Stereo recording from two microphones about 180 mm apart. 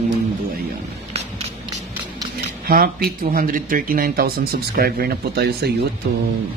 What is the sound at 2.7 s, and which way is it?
Speech, 55° right (ahead or behind).